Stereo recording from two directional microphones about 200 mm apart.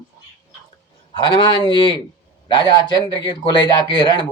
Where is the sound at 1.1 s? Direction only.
25° left (ahead or behind).